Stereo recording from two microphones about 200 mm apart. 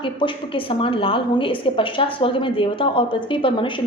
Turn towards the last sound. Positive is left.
turn(degrees=25)  # may be behind; listen again after turning